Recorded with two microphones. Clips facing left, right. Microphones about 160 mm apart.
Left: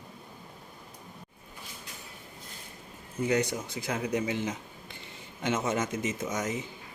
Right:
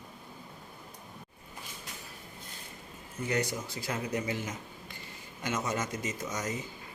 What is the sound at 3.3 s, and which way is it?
Speech, 20° left (ahead or behind).